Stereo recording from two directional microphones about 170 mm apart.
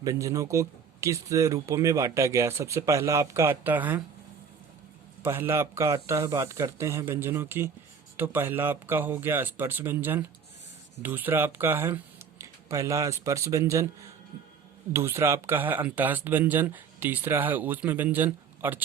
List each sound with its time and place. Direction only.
0.0 s speech: 20° right (ahead or behind)
5.2 s speech: 15° right (ahead or behind)